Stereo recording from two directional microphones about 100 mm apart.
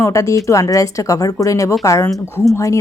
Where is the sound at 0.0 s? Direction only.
30° left (ahead or behind).